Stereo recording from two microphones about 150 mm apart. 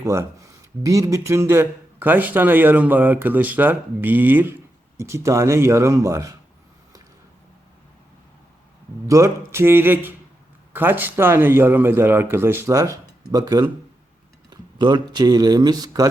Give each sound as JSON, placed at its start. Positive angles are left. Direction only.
{"t": 0.0, "sound": "speech", "side_deg": -20}
{"t": 9.0, "sound": "speech", "side_deg": -20}
{"t": 14.5, "sound": "a sound", "side_deg": -30}
{"t": 15.1, "sound": "speech", "side_deg": -30}